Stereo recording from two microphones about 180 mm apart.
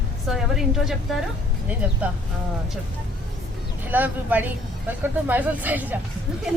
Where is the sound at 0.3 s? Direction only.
Centre (ahead or behind).